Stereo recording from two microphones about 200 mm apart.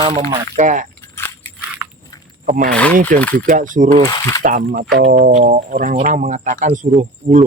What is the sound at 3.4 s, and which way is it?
Speech, 40° right (ahead or behind).